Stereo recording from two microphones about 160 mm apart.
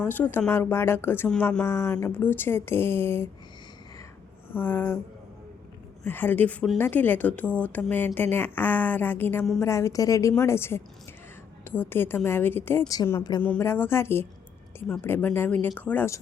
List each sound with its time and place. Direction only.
0.0 s speech: 10° left (ahead or behind)
4.5 s speech: 15° left (ahead or behind)
6.1 s a woman's voice: 10° left (ahead or behind)